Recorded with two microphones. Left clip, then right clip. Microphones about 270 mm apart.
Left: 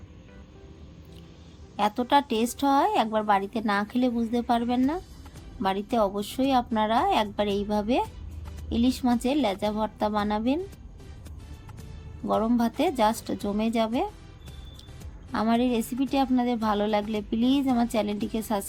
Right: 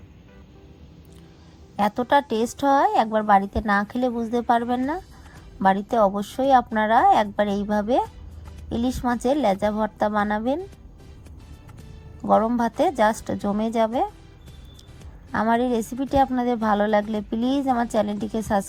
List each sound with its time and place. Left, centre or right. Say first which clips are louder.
1.7 s a woman's voice: right 3 dB; right
12.2 s a woman's voice: right 6 dB; right
15.3 s a woman's voice: right 4 dB; right